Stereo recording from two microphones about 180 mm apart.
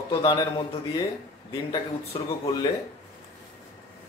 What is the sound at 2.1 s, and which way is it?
Speech, 25° left (ahead or behind).